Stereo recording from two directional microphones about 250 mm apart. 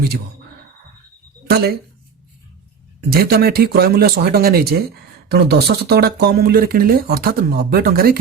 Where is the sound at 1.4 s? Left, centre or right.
Right.